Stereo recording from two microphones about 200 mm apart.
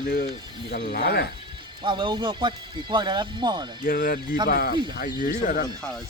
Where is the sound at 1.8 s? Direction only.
25° right (ahead or behind).